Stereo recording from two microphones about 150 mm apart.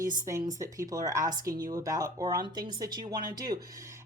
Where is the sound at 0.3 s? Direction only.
20° right (ahead or behind).